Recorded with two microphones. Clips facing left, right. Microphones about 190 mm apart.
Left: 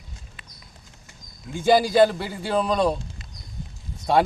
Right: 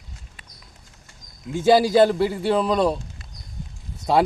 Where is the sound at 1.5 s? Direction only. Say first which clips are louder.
Right 2 dB; centre (ahead or behind).